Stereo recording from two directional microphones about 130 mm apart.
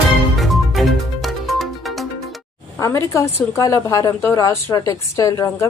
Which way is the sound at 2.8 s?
25° left (ahead or behind).